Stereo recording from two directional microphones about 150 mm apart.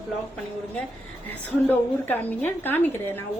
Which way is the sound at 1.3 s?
10° left (ahead or behind).